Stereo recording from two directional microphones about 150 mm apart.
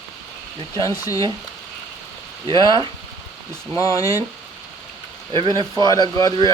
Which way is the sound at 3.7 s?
20° left (ahead or behind).